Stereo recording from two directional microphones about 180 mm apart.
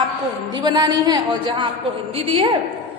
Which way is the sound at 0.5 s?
25° right (ahead or behind).